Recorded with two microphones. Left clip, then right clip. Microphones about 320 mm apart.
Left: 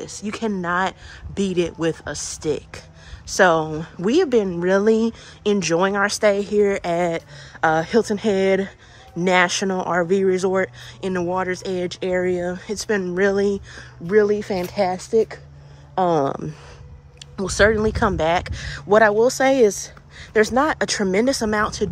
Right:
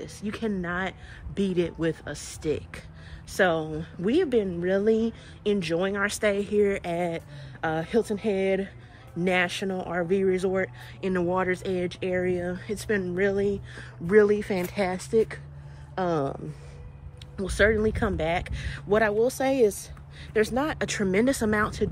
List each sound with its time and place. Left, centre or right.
0.2 s speech: centre
13.7 s speech: centre
17.4 s speech: centre